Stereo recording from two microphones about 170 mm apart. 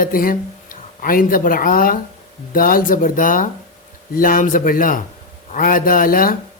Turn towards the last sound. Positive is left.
turn(degrees=55)  # may be behind; listen again after turning